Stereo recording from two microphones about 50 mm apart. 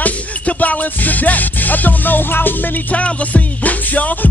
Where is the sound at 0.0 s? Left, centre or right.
Left.